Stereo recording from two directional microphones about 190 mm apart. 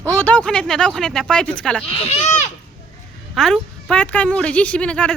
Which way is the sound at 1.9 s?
35° left (ahead or behind).